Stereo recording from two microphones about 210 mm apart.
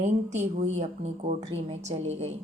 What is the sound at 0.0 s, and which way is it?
A woman's voice, 35° right (ahead or behind).